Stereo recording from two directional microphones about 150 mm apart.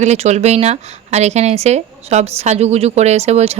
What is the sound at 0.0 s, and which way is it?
Speech, 50° right (ahead or behind).